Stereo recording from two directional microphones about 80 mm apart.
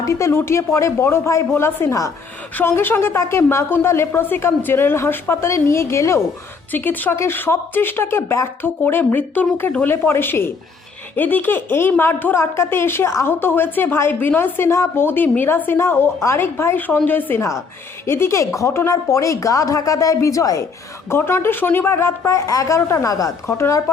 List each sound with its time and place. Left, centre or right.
0.0 s a woman's voice: left
2.6 s a woman's voice: left
6.7 s a woman's voice: left
21.1 s a woman's voice: left